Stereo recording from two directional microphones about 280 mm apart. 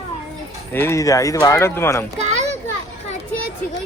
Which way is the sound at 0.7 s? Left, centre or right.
Centre.